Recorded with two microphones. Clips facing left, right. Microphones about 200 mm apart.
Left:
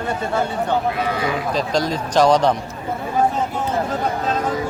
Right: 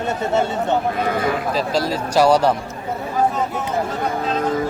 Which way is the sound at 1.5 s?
5° right (ahead or behind).